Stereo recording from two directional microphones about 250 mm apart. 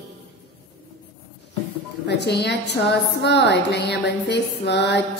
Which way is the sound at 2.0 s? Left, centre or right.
Left.